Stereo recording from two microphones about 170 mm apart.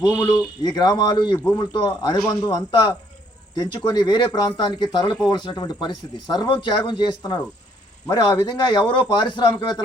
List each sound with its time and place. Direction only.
0.2 s speech: 25° left (ahead or behind)
1.4 s a man's voice: 15° left (ahead or behind)
1.7 s speech: 25° left (ahead or behind)